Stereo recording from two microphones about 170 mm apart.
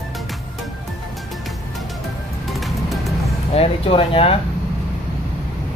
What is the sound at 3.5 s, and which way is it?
Speech, 35° left (ahead or behind).